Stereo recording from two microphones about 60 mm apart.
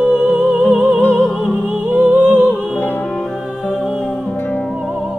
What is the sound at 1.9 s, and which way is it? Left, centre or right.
Music, right.